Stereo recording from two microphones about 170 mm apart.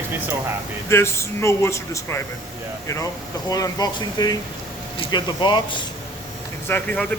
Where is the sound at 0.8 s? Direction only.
15° left (ahead or behind).